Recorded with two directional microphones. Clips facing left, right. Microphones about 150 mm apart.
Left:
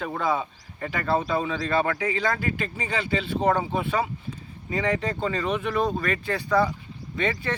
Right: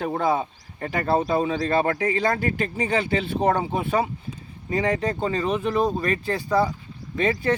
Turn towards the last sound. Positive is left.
turn(degrees=-35)  # may be behind; listen again after turning